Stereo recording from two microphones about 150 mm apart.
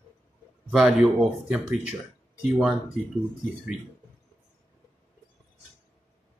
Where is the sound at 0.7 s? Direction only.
5° right (ahead or behind).